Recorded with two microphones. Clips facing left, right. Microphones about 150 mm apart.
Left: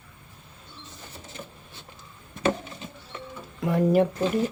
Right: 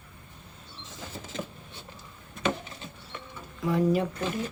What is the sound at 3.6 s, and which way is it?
Speech, 55° left (ahead or behind).